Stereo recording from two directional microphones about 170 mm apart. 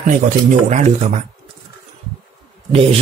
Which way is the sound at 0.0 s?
50° right (ahead or behind).